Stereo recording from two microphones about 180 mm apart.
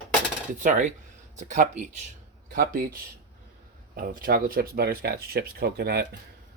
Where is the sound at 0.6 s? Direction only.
45° right (ahead or behind); by 6.1 s 65° right (ahead or behind).